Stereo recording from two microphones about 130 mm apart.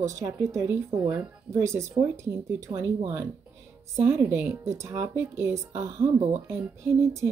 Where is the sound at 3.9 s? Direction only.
15° right (ahead or behind).